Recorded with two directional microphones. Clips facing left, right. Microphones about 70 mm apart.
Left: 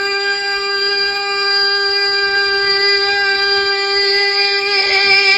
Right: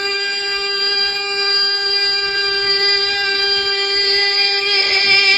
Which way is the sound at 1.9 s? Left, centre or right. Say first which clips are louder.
Left 5 dB; left.